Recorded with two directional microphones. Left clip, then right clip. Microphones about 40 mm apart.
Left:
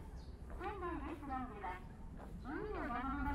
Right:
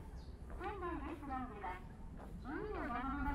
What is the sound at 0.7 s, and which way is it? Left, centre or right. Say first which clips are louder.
Vehicle: even; centre.